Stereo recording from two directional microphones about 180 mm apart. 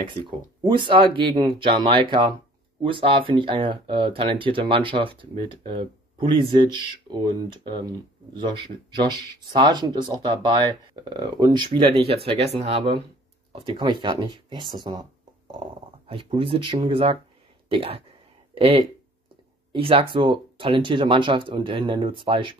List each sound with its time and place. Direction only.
0.1 s speech: 25° right (ahead or behind)